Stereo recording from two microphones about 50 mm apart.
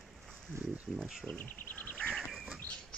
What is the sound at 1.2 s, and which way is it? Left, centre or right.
Insect, left.